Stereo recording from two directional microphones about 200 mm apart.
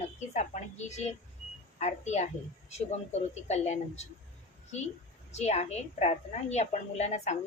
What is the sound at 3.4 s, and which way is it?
Speech, 35° left (ahead or behind).